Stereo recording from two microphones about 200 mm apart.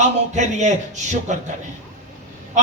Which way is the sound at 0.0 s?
35° right (ahead or behind).